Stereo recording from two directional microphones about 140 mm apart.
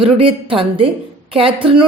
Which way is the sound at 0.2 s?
40° right (ahead or behind).